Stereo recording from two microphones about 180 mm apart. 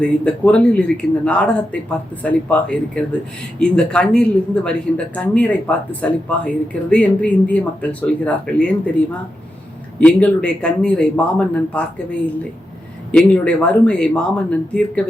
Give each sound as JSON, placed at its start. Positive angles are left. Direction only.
{"t": 0.0, "sound": "speech", "side_deg": 5}
{"t": 10.0, "sound": "speech", "side_deg": 10}